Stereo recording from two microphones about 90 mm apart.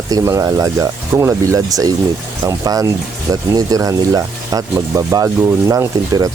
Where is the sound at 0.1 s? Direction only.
40° right (ahead or behind).